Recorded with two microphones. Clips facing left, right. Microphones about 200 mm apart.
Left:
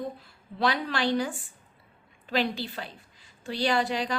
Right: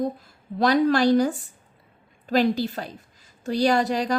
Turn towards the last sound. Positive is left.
turn(degrees=-40)  # may be behind; listen again after turning